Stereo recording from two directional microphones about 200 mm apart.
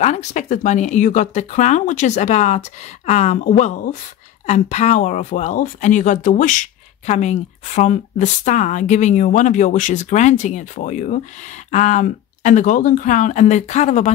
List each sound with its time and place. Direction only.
0.0 s speech: 35° left (ahead or behind)